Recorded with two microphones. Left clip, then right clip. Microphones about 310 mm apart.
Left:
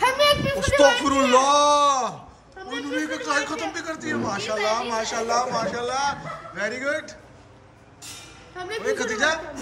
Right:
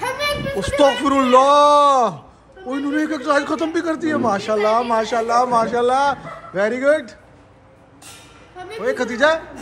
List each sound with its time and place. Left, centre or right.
0.6 s a man's voice: centre
8.7 s a man's voice: centre